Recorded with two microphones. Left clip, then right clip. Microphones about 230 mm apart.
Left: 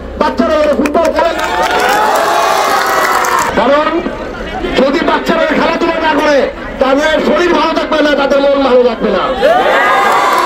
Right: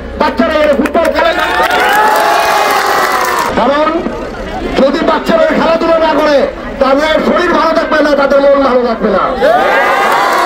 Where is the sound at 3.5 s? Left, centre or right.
Left.